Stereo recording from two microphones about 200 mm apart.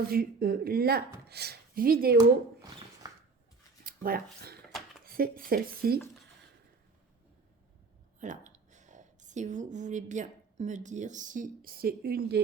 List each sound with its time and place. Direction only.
0.1 s speech: 50° right (ahead or behind)
3.8 s speech: 45° right (ahead or behind)
5.0 s dishes: 45° right (ahead or behind)
5.5 s speech: 50° right (ahead or behind)
8.2 s a woman's voice: 40° right (ahead or behind)